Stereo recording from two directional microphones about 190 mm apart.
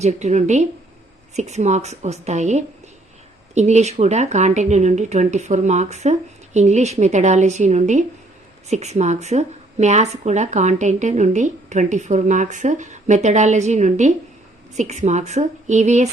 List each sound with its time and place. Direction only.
0.0 s speech: 35° right (ahead or behind)